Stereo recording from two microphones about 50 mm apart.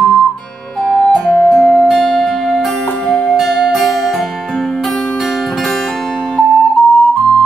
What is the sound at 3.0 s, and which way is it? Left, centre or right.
Music, left.